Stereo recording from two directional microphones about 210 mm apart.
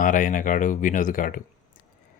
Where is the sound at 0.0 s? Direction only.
40° left (ahead or behind).